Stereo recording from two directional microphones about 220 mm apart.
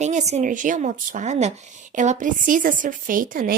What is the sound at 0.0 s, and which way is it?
A woman's voice, 30° right (ahead or behind).